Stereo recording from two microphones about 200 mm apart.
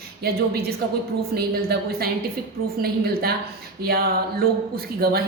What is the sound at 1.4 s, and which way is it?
Speech, 50° right (ahead or behind).